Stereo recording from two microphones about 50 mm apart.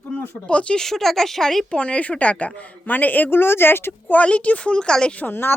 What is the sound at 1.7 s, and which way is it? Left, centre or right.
Speech, left.